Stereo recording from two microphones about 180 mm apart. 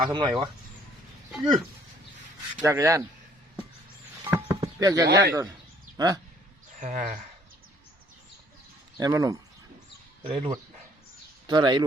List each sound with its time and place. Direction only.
0.0 s speech: 25° right (ahead or behind)
2.6 s speech: 15° right (ahead or behind)
4.3 s a sound: 10° right (ahead or behind)
5.1 s speech: 20° right (ahead or behind)
6.7 s speech: 45° right (ahead or behind)
9.0 s speech: 20° right (ahead or behind)